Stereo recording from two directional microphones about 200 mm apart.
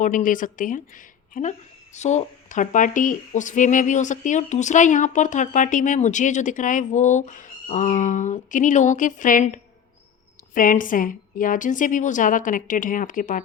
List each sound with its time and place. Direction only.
0.0 s speech: 40° left (ahead or behind)